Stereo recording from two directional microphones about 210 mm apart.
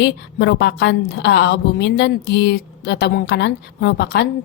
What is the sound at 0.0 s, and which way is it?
A woman's voice, 55° left (ahead or behind).